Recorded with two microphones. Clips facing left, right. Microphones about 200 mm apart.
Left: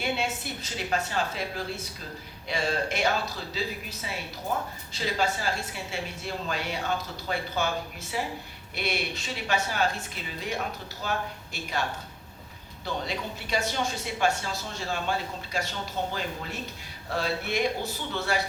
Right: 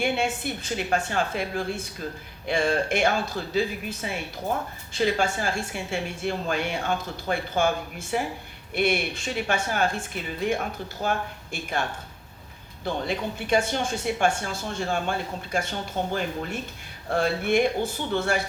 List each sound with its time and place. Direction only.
0.0 s a woman's voice: 50° right (ahead or behind)